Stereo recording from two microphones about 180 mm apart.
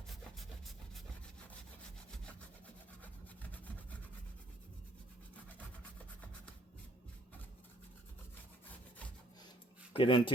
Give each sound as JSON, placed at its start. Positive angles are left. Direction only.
{"t": 9.9, "sound": "speech", "side_deg": 30}